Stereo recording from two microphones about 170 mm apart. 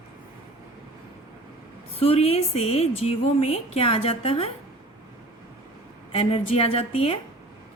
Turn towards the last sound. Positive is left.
turn(degrees=35)  # may be behind; listen again after turning